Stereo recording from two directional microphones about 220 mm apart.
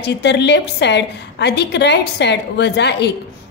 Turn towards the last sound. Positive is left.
turn(degrees=50)  # may be behind; listen again after turning